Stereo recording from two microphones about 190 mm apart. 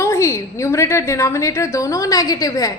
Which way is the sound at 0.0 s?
15° left (ahead or behind).